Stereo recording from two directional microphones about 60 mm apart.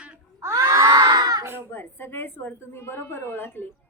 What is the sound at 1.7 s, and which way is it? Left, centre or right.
A woman's voice, left.